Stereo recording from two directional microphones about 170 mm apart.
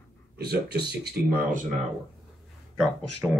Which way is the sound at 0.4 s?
70° right (ahead or behind).